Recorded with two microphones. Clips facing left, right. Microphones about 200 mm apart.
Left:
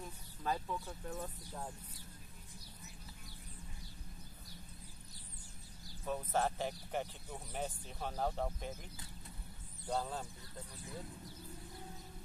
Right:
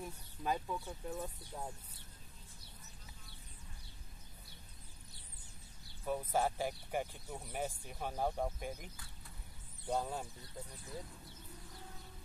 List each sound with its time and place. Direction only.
0.0 s a sound: 15° right (ahead or behind)
0.7 s speech: centre (ahead or behind)
6.0 s speech: 10° right (ahead or behind)
9.8 s speech: 10° right (ahead or behind)